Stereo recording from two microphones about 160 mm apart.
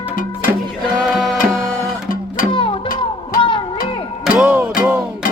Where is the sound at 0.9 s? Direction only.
Centre (ahead or behind).